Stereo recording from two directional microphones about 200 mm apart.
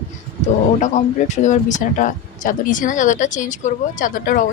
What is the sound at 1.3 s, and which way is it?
Speech, 35° left (ahead or behind).